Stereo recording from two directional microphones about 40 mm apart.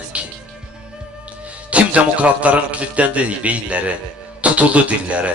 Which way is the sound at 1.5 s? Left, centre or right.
Right.